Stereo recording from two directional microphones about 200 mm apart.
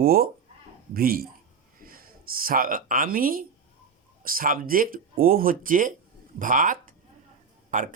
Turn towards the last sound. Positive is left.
turn(degrees=-40)  # may be behind; listen again after turning